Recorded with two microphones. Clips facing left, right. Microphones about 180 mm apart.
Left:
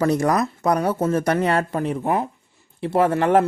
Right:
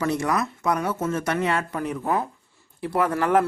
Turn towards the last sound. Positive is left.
turn(degrees=30)  # may be behind; listen again after turning